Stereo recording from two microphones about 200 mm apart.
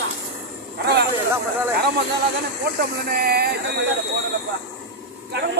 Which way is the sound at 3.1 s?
50° right (ahead or behind).